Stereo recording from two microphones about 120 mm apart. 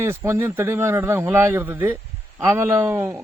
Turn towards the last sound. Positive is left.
turn(degrees=-20)  # may be behind; listen again after turning